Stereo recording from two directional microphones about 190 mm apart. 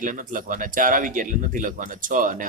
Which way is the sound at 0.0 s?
45° right (ahead or behind).